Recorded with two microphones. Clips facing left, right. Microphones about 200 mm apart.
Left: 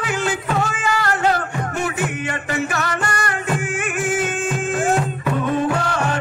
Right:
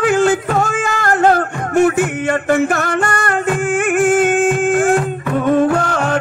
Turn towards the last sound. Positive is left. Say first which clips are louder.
# right 5 dB
turn(degrees=-50)  # may be behind; listen again after turning